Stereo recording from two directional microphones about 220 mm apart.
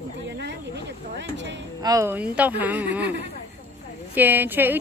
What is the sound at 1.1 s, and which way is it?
Speech, 55° right (ahead or behind).